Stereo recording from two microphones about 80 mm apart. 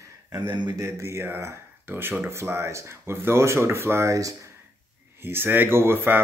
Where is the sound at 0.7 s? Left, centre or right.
Right.